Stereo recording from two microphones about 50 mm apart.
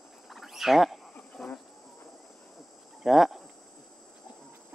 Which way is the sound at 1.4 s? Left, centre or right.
Centre.